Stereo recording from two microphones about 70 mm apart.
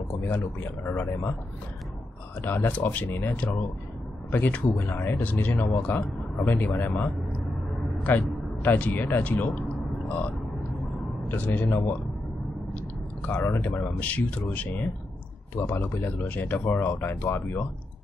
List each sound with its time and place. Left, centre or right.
0.3 s a man's voice: left
2.4 s speech: left
8.1 s speech: left
11.2 s speech: left
13.3 s speech: left
15.5 s a man's voice: left